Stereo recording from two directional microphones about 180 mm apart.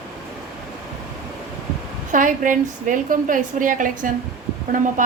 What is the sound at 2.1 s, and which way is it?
A woman's voice, 45° right (ahead or behind).